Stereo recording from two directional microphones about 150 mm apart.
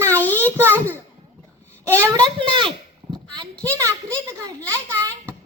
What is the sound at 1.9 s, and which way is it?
Speech, 20° right (ahead or behind).